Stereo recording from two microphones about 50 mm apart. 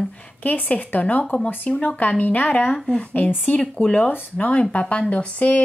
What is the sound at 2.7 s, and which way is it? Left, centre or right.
Speech, centre.